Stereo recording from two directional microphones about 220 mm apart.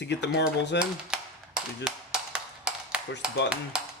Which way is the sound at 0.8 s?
5° right (ahead or behind).